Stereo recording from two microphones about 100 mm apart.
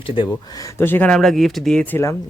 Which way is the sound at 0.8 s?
20° left (ahead or behind).